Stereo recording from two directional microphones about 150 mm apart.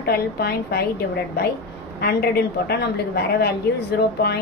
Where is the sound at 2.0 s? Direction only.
90° left.